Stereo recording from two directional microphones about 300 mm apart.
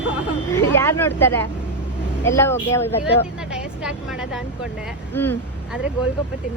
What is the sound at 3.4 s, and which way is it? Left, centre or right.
Vehicle, centre.